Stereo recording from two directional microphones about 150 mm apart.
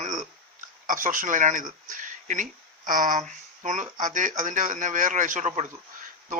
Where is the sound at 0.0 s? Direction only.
55° right (ahead or behind).